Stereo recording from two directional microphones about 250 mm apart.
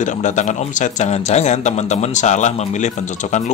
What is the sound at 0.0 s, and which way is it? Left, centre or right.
A man's voice, left.